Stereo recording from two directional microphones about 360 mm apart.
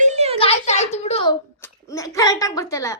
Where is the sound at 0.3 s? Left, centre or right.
Centre.